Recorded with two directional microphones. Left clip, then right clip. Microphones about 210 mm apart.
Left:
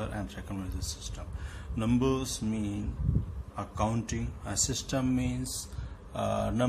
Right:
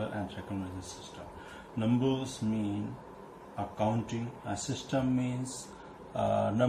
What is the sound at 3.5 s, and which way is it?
Speech, 30° left (ahead or behind).